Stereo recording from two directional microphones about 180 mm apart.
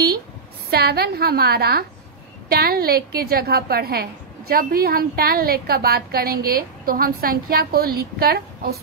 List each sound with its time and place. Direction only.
0.7 s a woman's voice: 60° right (ahead or behind)